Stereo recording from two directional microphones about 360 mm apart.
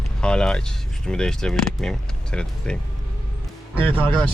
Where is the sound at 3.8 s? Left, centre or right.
Centre.